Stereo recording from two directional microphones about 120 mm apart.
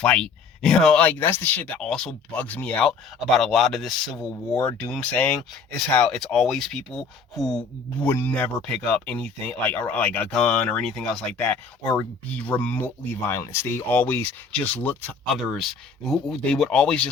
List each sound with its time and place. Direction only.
0.0 s speech: 10° left (ahead or behind)
8.0 s speech: 15° left (ahead or behind)
11.8 s speech: 30° left (ahead or behind)
12.4 s speech: 15° left (ahead or behind)
15.4 s speech: centre (ahead or behind)